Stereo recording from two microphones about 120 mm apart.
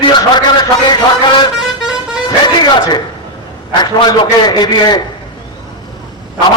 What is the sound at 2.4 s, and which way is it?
A man's voice, 35° left (ahead or behind).